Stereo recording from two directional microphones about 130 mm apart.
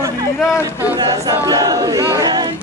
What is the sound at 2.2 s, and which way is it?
Chatter, 30° right (ahead or behind).